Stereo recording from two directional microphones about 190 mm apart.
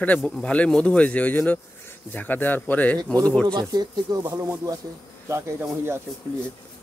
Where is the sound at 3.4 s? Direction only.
20° right (ahead or behind).